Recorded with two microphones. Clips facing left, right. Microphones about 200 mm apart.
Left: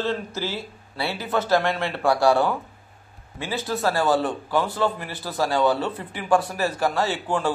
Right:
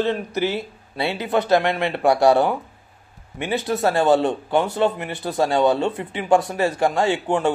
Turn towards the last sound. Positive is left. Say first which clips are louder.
# right 4 dB
turn(degrees=-20)  # may be behind; listen again after turning